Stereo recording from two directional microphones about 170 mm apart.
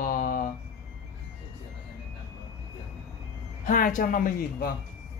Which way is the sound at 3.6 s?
55° left (ahead or behind).